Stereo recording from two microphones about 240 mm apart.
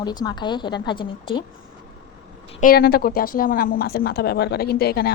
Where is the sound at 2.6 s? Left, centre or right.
Left.